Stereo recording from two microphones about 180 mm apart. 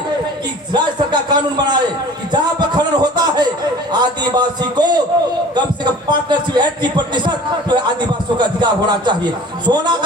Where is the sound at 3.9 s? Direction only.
25° right (ahead or behind).